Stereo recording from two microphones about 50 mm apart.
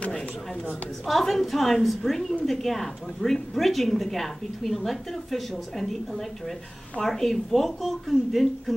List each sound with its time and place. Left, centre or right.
1.0 s a woman's voice: centre